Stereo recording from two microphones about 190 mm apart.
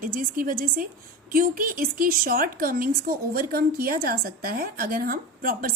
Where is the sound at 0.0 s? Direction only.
50° right (ahead or behind).